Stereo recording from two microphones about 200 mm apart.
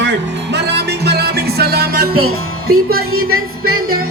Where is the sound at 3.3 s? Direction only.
90° right.